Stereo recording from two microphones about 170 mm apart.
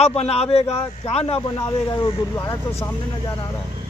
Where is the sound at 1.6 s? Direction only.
25° left (ahead or behind).